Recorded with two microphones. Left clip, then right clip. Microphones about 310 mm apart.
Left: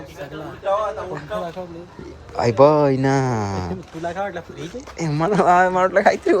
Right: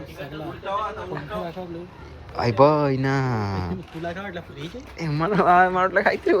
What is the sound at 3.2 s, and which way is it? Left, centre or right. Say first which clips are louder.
Speech: left 4 dB; centre.